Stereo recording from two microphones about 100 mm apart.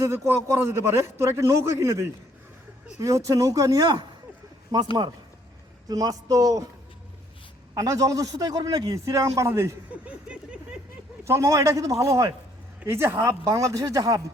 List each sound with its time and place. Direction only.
0.0 s a man's voice: 25° right (ahead or behind)
5.9 s a man's voice: 40° right (ahead or behind)
7.7 s a man's voice: 40° right (ahead or behind)
9.9 s vehicle: 10° right (ahead or behind)
11.3 s a man's voice: 30° right (ahead or behind)